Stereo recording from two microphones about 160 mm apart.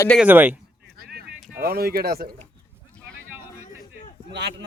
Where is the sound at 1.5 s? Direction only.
75° right (ahead or behind).